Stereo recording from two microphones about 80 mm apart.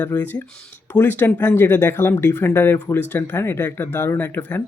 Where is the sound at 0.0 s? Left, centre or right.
Left.